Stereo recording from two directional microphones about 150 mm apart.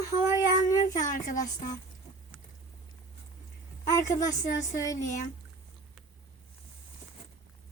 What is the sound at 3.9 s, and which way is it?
A woman's voice, 25° left (ahead or behind).